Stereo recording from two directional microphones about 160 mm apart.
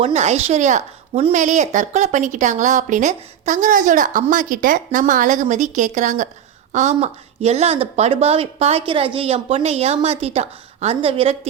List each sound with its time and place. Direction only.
0.0 s a woman's voice: 40° right (ahead or behind)